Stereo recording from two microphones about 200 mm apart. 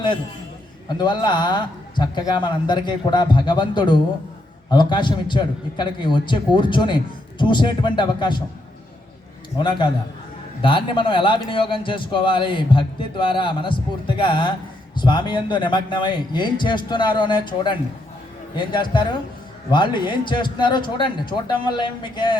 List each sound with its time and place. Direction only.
0.9 s a man's voice: 20° left (ahead or behind)
9.6 s a man's voice: 25° left (ahead or behind)